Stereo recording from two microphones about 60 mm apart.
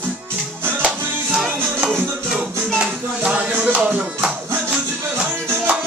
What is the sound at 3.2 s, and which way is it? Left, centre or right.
Music, right.